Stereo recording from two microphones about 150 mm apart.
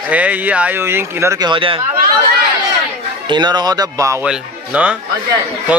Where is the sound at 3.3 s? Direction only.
30° right (ahead or behind).